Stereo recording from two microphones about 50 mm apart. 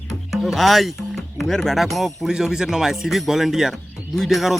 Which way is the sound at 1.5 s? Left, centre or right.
Centre.